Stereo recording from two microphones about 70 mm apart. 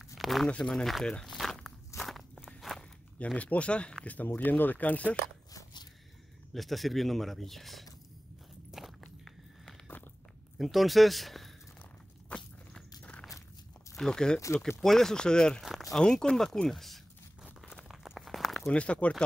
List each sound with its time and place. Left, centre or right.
0.0 s walk: centre
0.5 s speech: centre
1.2 s walk: centre
3.3 s speech: centre
6.5 s speech: centre
8.7 s walk: centre
10.6 s speech: centre
12.3 s walk: centre
13.9 s speech: centre
15.6 s a sound: centre
16.0 s speech: centre
17.4 s a sound: centre
18.7 s speech: centre